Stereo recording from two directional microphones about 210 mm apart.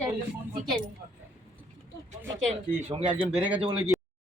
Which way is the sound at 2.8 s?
30° right (ahead or behind).